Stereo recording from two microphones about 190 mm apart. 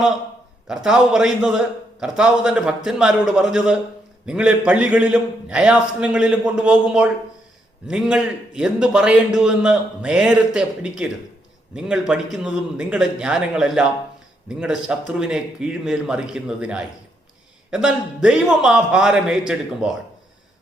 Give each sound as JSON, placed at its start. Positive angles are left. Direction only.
{"t": 0.7, "sound": "a man's voice", "side_deg": -5}